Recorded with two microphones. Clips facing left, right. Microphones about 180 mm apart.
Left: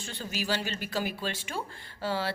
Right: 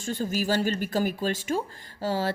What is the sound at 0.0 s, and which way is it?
A woman's voice, 45° right (ahead or behind).